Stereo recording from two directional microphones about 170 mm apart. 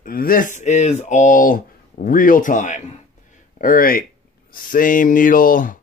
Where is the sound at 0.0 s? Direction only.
55° left (ahead or behind).